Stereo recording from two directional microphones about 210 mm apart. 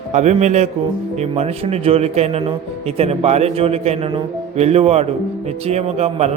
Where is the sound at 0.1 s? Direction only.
35° right (ahead or behind).